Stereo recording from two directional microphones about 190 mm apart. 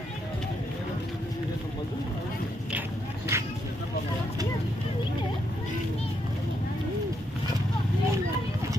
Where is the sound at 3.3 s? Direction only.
15° right (ahead or behind).